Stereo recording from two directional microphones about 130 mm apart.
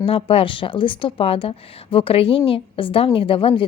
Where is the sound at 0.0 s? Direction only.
45° left (ahead or behind).